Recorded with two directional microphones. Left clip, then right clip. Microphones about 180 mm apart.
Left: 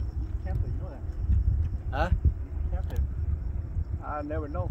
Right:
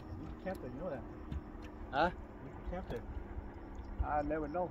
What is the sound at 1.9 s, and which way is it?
Speech, 55° left (ahead or behind).